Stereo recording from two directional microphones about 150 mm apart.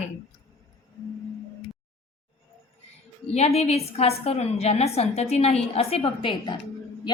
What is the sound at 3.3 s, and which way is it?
A woman's voice, 45° left (ahead or behind).